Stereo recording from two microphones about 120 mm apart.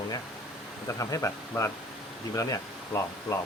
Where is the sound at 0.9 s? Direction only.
30° left (ahead or behind).